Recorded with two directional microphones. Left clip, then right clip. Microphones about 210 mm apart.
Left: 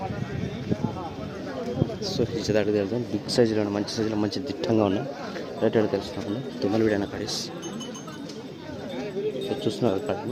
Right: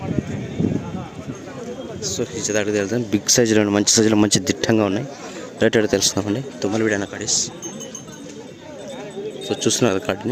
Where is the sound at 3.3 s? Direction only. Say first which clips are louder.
Right 5 dB; 65° right (ahead or behind).